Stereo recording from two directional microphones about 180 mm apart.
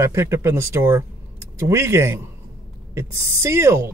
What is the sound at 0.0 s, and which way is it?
Speech, 15° right (ahead or behind).